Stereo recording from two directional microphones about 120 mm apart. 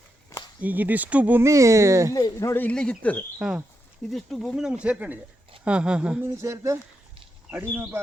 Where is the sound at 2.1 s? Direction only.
30° left (ahead or behind).